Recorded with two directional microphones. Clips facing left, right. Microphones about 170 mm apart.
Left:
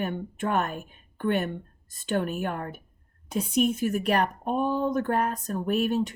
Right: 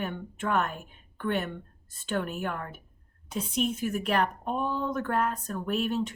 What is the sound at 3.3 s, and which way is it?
Speech, 15° left (ahead or behind).